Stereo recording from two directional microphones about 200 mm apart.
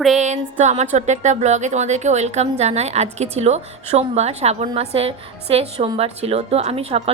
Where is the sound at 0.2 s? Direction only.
35° right (ahead or behind).